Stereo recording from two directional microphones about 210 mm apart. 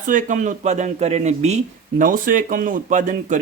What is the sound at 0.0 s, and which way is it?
Speech, 35° right (ahead or behind).